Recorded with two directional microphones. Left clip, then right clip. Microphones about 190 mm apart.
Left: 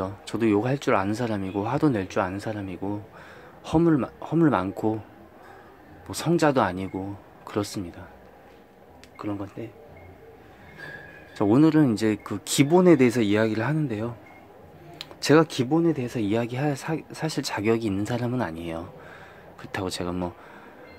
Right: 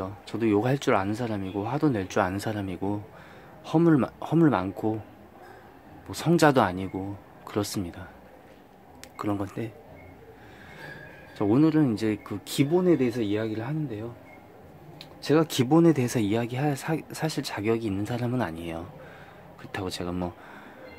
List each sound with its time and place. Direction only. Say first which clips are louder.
0.0 s speech: left 3 dB; 10° left (ahead or behind)
0.6 s speech: left 1 dB; centre (ahead or behind)
2.0 s speech: right 1 dB; 5° right (ahead or behind)
4.5 s speech: left 2 dB; 5° left (ahead or behind)
6.0 s speech: left 1 dB; 5° left (ahead or behind)
6.3 s speech: right 1 dB; 5° right (ahead or behind)
6.7 s speech: left 1 dB; 5° left (ahead or behind)
9.1 s speech: right 2 dB; 10° right (ahead or behind)
11.3 s speech: left 3 dB; 10° left (ahead or behind)
12.7 s speech: left 6 dB; 30° left (ahead or behind)
15.0 s a sound: left 5 dB; 30° left (ahead or behind)
15.4 s speech: even; 5° right (ahead or behind)
15.7 s speech: right 3 dB; 15° right (ahead or behind)
16.3 s speech: left 2 dB; 5° left (ahead or behind)